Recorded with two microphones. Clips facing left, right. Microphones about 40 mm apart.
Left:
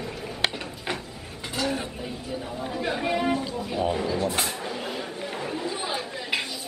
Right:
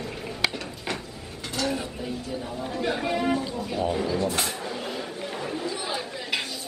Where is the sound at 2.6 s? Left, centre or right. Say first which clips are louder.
Even; centre.